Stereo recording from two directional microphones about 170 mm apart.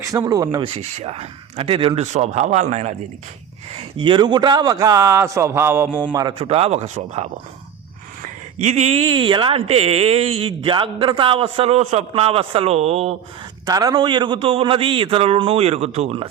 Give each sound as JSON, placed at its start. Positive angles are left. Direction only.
{"t": 0.0, "sound": "a man's voice", "side_deg": -20}
{"t": 0.8, "sound": "a man's voice", "side_deg": -40}
{"t": 13.7, "sound": "speech", "side_deg": -20}